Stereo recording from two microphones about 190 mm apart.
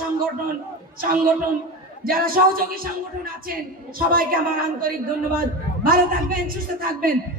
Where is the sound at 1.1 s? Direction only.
50° right (ahead or behind).